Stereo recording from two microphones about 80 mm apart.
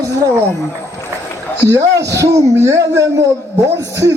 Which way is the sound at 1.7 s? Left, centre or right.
Right.